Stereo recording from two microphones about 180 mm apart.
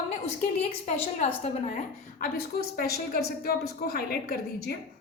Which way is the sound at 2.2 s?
60° left (ahead or behind).